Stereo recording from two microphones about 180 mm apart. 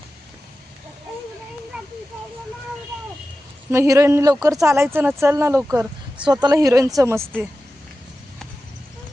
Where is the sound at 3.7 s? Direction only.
15° right (ahead or behind).